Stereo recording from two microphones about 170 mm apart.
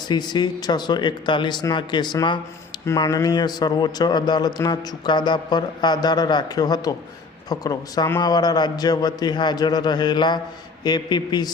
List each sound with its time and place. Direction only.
0.1 s speech: 25° left (ahead or behind)